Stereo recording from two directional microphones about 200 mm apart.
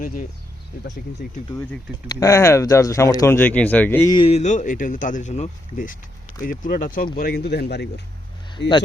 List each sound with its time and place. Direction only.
0.0 s speech: 45° left (ahead or behind)
2.0 s speech: 15° left (ahead or behind)
4.1 s speech: 30° left (ahead or behind); by 8.7 s 60° left (ahead or behind)